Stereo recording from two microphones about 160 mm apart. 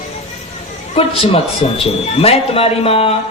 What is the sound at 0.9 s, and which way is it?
A man's voice, 40° left (ahead or behind).